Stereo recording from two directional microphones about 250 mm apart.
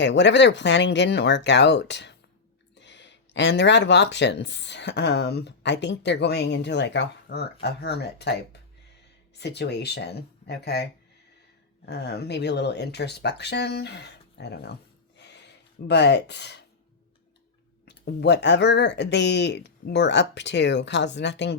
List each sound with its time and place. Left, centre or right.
0.0 s speech: left
11.9 s speech: left
15.2 s a sound: left
17.8 s speech: left